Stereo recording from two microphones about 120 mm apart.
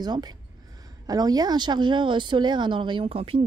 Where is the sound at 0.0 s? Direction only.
35° right (ahead or behind).